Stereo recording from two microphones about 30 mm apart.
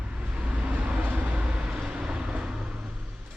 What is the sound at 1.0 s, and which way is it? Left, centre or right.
Vehicle, right.